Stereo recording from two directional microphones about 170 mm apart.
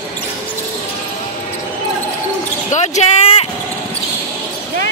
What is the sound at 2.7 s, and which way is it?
Basketball bounce, 45° left (ahead or behind).